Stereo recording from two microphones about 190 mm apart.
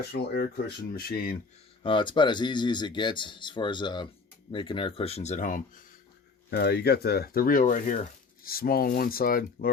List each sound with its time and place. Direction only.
0.1 s speech: 55° left (ahead or behind)
1.8 s speech: 25° left (ahead or behind); by 5.8 s 45° left (ahead or behind)
6.5 s speech: 55° left (ahead or behind)